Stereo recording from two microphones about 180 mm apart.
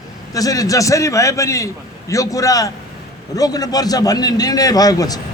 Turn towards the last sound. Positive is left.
turn(degrees=20)  # may be behind; listen again after turning